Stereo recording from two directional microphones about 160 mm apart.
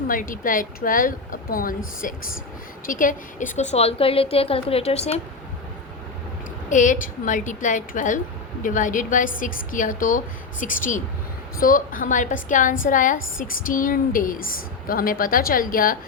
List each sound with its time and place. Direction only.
0.1 s a woman's voice: 55° left (ahead or behind); by 5.2 s 40° left (ahead or behind)
6.7 s a woman's voice: 50° left (ahead or behind)